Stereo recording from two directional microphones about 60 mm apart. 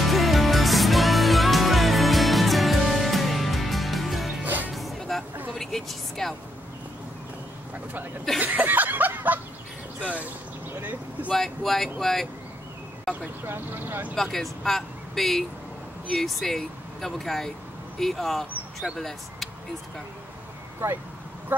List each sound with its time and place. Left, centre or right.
0.0 s music: centre
4.4 s music: right
4.7 s music: centre
5.5 s vehicle: centre
8.4 s chuckle: right
10.0 s a sound: right
10.8 s vehicle: right
11.3 s speech: centre
13.5 s speech: right
14.1 s speech: centre
20.8 s speech: right
21.5 s a sound: right